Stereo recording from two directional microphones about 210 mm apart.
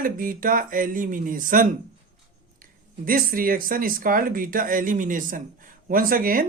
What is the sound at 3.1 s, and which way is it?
Speech, 40° right (ahead or behind).